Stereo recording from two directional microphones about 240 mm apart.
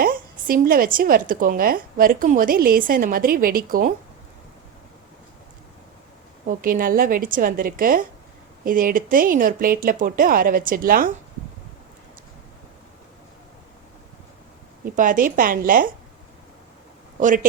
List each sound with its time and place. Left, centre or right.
0.0 s a woman's voice: right
6.5 s a woman's voice: right
14.9 s a woman's voice: right
17.2 s speech: right